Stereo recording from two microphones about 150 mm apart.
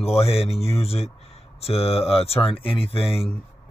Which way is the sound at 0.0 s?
40° left (ahead or behind).